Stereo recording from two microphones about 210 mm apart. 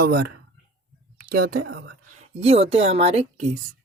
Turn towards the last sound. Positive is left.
turn(degrees=-30)  # may be behind; listen again after turning